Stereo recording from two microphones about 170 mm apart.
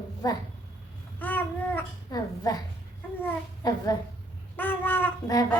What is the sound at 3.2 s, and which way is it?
A child's voice, 10° left (ahead or behind).